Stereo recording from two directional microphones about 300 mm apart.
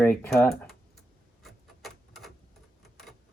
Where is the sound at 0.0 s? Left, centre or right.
Centre.